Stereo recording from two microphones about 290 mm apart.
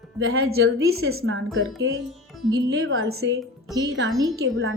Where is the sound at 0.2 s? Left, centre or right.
Right.